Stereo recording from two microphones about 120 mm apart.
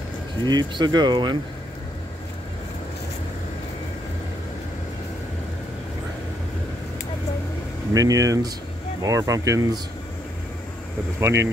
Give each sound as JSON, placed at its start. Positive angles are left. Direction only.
{"t": 0.5, "sound": "speech", "side_deg": -35}
{"t": 7.9, "sound": "speech", "side_deg": -30}
{"t": 11.1, "sound": "speech", "side_deg": -20}